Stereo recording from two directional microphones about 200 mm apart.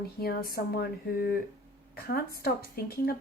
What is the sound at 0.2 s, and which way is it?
Speech, 50° left (ahead or behind).